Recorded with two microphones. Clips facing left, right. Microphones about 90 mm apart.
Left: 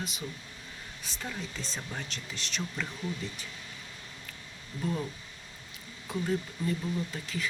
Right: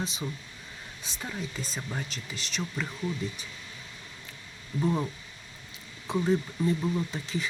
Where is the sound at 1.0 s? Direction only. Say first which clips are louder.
Right 1 dB; 20° right (ahead or behind).